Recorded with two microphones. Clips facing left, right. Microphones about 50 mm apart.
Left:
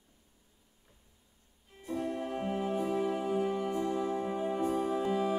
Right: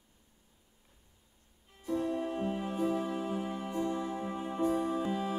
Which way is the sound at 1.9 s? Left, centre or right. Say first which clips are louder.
Right 2 dB; left.